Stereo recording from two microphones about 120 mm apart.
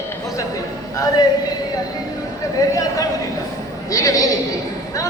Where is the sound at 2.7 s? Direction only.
30° left (ahead or behind).